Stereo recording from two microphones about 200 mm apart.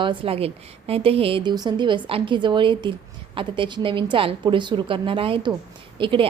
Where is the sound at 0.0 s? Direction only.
25° right (ahead or behind).